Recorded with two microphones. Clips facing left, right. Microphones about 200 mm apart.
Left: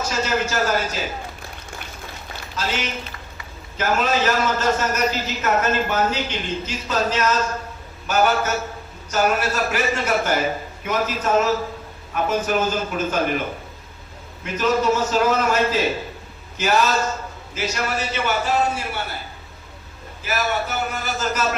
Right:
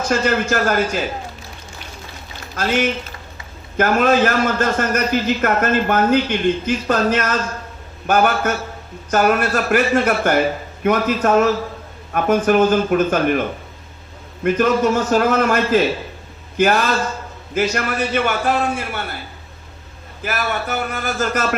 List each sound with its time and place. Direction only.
0.0 s a man's voice: 55° right (ahead or behind)
2.6 s a man's voice: 55° right (ahead or behind)
14.4 s a man's voice: 55° right (ahead or behind)
20.2 s a man's voice: 55° right (ahead or behind)